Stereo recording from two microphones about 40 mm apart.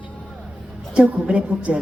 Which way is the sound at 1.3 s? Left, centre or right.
Right.